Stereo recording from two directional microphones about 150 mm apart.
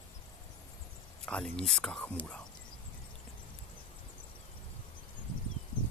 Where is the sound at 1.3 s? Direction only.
5° left (ahead or behind).